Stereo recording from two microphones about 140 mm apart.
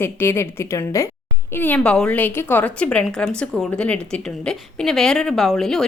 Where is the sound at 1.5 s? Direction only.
10° left (ahead or behind).